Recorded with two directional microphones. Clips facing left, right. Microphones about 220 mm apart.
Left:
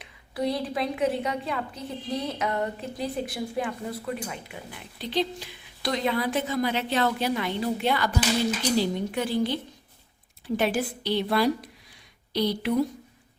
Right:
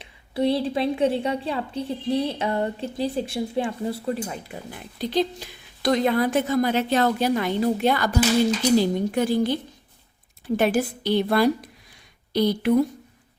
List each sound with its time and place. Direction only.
0.0 s a woman's voice: 30° right (ahead or behind); by 12.7 s 50° right (ahead or behind)